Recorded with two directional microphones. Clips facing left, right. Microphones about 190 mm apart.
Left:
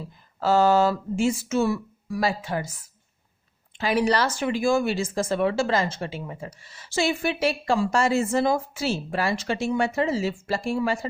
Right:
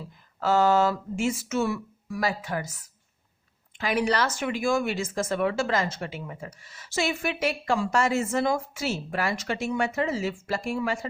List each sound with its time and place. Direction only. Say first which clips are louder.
0.3 s speech: left 2 dB; 30° left (ahead or behind)
3.8 s speech: left 3 dB; 30° left (ahead or behind)